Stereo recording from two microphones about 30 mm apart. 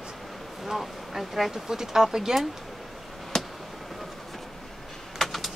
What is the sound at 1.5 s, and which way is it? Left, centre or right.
Speech, centre.